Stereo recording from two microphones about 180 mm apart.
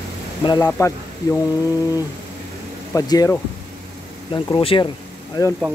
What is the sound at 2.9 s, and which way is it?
Speech, 20° left (ahead or behind).